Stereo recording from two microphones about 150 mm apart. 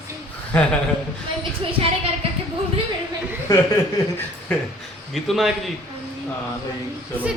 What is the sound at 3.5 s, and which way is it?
Speech, 20° left (ahead or behind).